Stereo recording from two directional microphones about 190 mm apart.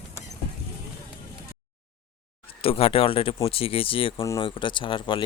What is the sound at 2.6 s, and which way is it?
Speech, 30° left (ahead or behind).